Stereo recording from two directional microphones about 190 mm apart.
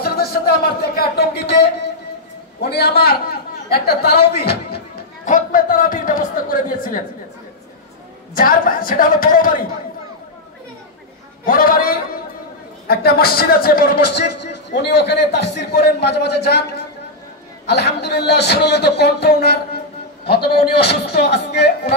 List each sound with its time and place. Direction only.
0.0 s a man's voice: 55° left (ahead or behind)
5.2 s a man's voice: 45° left (ahead or behind)
8.4 s a man's voice: 50° left (ahead or behind)
11.4 s a man's voice: 50° left (ahead or behind)
17.6 s a man's voice: 60° left (ahead or behind)